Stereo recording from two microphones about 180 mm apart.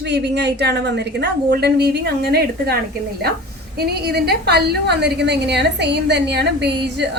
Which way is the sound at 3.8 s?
65° right (ahead or behind).